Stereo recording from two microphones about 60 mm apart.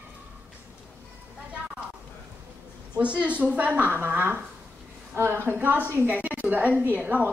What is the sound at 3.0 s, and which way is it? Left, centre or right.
A woman's voice, right.